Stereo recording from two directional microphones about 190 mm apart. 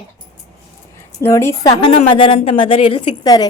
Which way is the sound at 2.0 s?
30° left (ahead or behind).